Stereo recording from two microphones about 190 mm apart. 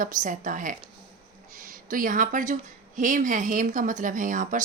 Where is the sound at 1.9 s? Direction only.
45° right (ahead or behind).